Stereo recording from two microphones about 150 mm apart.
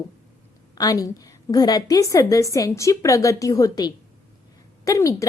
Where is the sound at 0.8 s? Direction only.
25° left (ahead or behind).